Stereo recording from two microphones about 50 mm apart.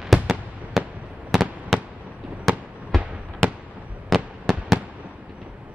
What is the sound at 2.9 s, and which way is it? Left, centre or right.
Fireworks, centre.